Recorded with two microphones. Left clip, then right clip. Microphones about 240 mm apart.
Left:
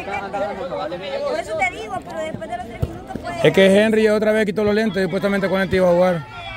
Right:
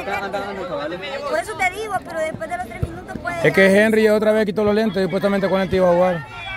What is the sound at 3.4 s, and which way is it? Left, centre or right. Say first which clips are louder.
Speech: left 1 dB; centre.